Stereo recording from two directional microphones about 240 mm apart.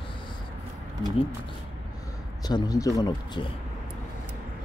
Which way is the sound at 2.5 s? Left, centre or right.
Centre.